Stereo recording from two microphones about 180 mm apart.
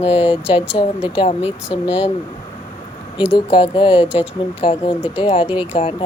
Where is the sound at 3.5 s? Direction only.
30° left (ahead or behind).